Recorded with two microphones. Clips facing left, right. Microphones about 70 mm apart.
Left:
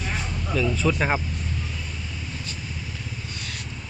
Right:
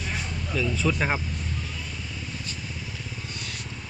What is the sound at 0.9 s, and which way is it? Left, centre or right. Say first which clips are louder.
Speech: left 2 dB; left.